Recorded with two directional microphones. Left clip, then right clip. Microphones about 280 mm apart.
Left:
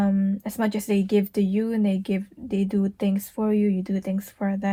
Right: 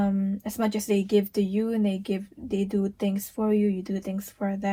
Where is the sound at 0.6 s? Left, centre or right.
Left.